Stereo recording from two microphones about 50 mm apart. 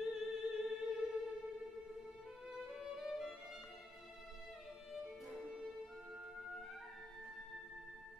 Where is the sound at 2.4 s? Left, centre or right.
Centre.